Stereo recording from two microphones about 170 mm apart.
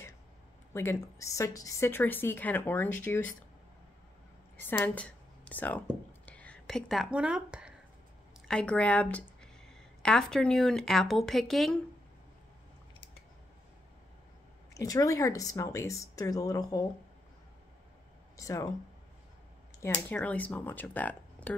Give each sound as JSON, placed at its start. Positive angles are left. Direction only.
{"t": 0.7, "sound": "a woman's voice", "side_deg": 15}
{"t": 4.6, "sound": "a woman's voice", "side_deg": 10}
{"t": 8.5, "sound": "speech", "side_deg": 5}
{"t": 14.7, "sound": "speech", "side_deg": 20}
{"t": 18.3, "sound": "speech", "side_deg": 20}
{"t": 19.8, "sound": "a woman's voice", "side_deg": 10}